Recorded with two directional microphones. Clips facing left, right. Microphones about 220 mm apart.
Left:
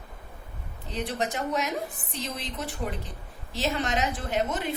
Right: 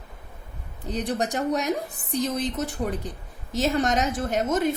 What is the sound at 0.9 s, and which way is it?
Speech, 45° right (ahead or behind).